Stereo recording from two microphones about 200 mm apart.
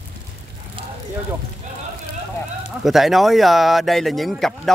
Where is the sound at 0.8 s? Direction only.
25° right (ahead or behind).